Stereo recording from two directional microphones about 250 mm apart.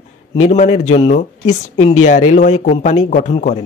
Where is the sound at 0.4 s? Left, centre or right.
Left.